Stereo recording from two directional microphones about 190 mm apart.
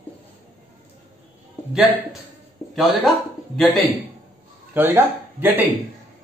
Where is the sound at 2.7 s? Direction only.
Centre (ahead or behind).